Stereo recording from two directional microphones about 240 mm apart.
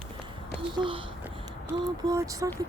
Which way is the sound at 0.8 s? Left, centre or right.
Right.